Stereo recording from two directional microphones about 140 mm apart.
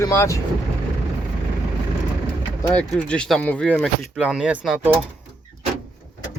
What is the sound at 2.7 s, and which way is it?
Speech, 5° left (ahead or behind).